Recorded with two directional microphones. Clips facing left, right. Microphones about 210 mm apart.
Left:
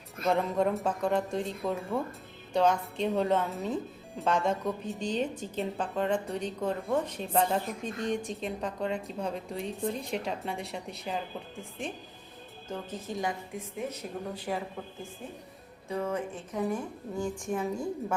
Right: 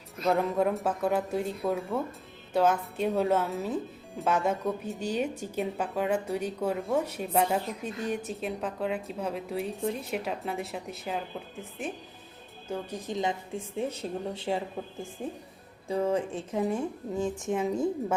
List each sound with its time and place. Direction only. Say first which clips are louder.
0.3 s a woman's voice: right 1 dB; centre (ahead or behind)
12.6 s a woman's voice: right 3 dB; 10° right (ahead or behind)
15.9 s a woman's voice: right 5 dB; 30° right (ahead or behind)